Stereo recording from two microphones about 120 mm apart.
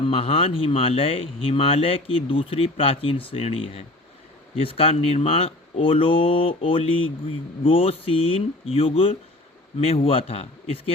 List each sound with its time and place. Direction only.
0.0 s speech: 55° left (ahead or behind)